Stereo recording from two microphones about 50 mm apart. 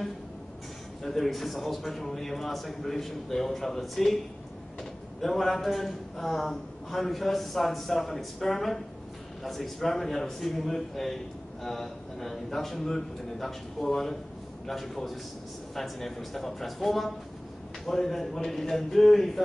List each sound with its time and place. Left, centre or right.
1.0 s a man's voice: centre
5.2 s a man's voice: centre